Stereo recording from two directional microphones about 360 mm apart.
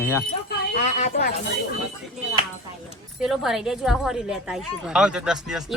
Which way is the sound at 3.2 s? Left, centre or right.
Centre.